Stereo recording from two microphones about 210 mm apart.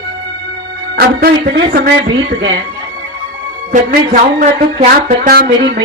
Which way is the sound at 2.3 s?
60° right (ahead or behind).